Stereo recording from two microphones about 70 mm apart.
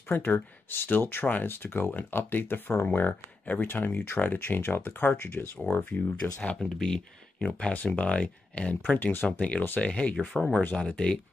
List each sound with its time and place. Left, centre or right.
0.1 s speech: left
6.2 s speech: centre
7.7 s speech: left